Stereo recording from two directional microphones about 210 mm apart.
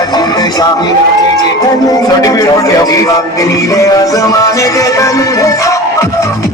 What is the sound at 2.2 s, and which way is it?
Music, 15° left (ahead or behind).